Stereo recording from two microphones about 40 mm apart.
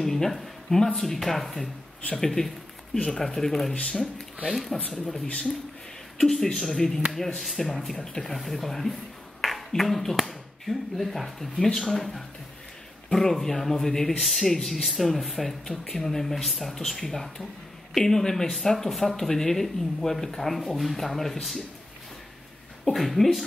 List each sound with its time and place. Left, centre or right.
0.0 s speech: centre
4.8 s speech: left
6.1 s speech: centre
9.4 s a sound: centre
9.7 s speech: centre
22.9 s speech: centre